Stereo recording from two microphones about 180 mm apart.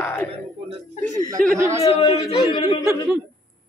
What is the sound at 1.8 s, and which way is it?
Speech, 25° left (ahead or behind).